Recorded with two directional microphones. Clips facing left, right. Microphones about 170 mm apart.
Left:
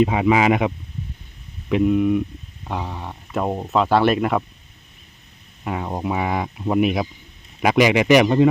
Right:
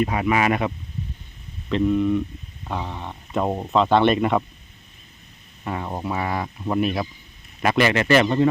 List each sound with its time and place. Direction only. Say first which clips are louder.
0.0 s speech: left 4 dB; 15° left (ahead or behind)
1.7 s speech: left 2 dB; 10° left (ahead or behind)
5.6 s speech: left 3 dB; 10° left (ahead or behind)